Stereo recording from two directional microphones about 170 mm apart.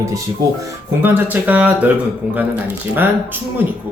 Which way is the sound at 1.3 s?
10° right (ahead or behind).